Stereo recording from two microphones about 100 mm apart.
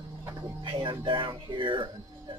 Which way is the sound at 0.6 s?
55° right (ahead or behind).